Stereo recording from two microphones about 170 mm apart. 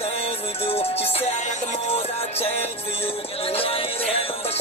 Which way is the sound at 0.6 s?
35° left (ahead or behind).